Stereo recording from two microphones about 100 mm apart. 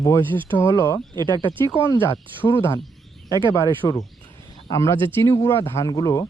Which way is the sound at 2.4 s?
25° left (ahead or behind).